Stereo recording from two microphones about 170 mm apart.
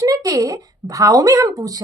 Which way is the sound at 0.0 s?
20° right (ahead or behind).